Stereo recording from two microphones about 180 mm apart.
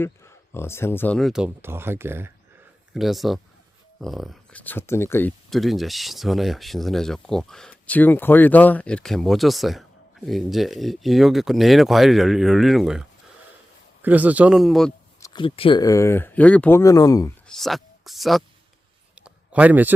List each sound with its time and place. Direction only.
0.0 s speech: 15° left (ahead or behind)
1.6 s speech: 10° right (ahead or behind)
2.9 s speech: centre (ahead or behind)
5.5 s speech: centre (ahead or behind)
15.2 s speech: 25° left (ahead or behind)
15.8 s speech: 15° left (ahead or behind)
17.5 s speech: centre (ahead or behind)
19.1 s a sound: 5° right (ahead or behind)